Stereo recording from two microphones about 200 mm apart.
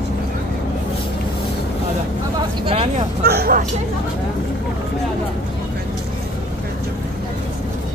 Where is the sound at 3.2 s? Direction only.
50° right (ahead or behind).